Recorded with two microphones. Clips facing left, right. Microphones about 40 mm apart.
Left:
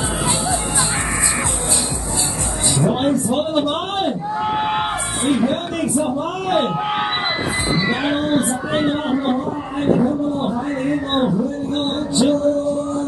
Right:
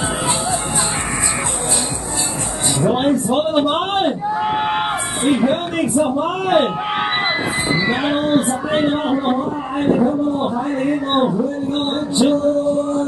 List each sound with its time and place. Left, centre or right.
2.8 s speech: centre
4.4 s a man's voice: centre